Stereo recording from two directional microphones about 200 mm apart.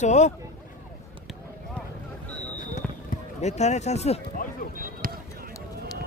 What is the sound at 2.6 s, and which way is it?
Basketball bounce, 45° left (ahead or behind).